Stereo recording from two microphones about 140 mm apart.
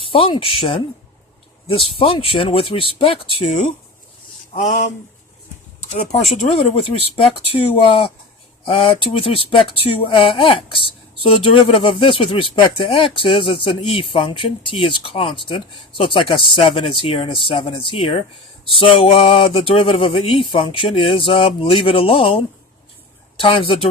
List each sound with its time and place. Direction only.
0.1 s speech: 40° left (ahead or behind)
4.5 s a sound: 55° left (ahead or behind)
5.8 s speech: 55° left (ahead or behind)
7.5 s speech: 40° left (ahead or behind)
23.4 s speech: 40° left (ahead or behind)